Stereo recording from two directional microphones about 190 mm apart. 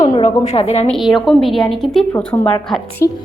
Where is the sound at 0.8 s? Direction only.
Centre (ahead or behind).